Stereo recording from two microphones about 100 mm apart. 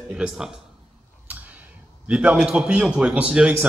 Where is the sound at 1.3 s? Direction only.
15° right (ahead or behind).